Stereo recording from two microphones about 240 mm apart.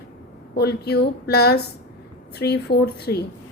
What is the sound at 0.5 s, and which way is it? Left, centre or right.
A woman's voice, left.